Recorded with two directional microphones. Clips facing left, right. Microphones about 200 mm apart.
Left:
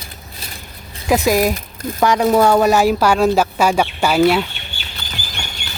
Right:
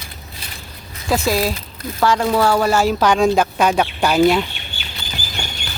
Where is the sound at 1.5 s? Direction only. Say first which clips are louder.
Left 4 dB; 45° left (ahead or behind).